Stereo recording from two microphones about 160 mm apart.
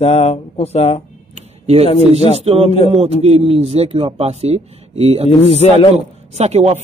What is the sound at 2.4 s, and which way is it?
A man's voice, 40° right (ahead or behind).